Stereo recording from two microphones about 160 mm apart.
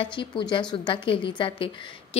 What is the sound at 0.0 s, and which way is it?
Speech, 30° left (ahead or behind).